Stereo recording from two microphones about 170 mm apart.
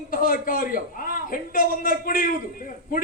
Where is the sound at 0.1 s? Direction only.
55° left (ahead or behind).